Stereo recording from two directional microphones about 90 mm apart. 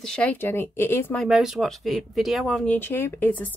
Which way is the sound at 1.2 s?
5° right (ahead or behind).